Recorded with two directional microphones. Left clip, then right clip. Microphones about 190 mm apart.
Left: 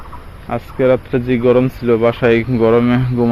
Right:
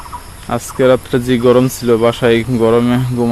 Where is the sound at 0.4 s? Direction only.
35° right (ahead or behind).